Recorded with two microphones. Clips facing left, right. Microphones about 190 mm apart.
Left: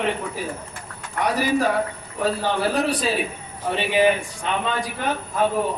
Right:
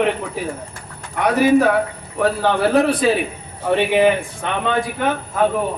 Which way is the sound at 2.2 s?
60° right (ahead or behind).